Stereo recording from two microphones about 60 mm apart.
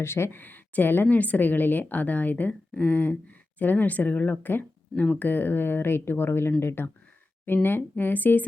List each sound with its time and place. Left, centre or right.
0.0 s a woman's voice: left